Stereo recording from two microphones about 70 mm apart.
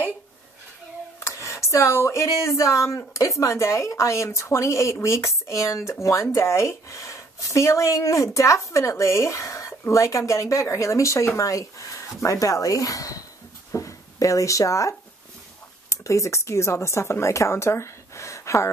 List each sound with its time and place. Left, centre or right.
1.2 s speech: left